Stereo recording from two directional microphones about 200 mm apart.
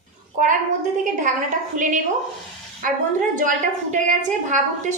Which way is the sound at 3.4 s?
40° right (ahead or behind).